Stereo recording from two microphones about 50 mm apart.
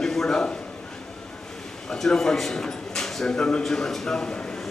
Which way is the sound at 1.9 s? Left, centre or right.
Centre.